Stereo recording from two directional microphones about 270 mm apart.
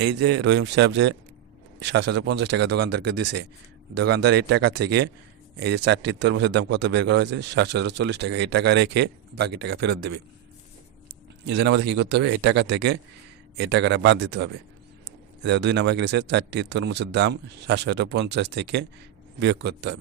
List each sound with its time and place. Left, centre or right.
0.2 s a man's voice: right
11.4 s a man's voice: right